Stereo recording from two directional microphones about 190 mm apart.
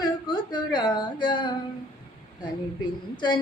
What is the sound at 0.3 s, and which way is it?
Speech, 25° left (ahead or behind).